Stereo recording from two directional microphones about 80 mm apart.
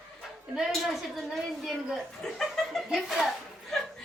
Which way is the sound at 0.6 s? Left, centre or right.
Centre.